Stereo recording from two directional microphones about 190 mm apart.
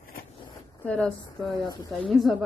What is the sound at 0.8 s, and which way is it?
A woman's voice, 10° left (ahead or behind).